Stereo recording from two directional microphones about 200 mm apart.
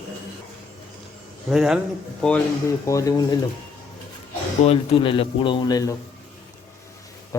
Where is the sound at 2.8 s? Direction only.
15° left (ahead or behind).